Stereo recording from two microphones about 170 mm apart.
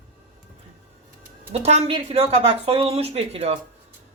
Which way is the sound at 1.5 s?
40° right (ahead or behind).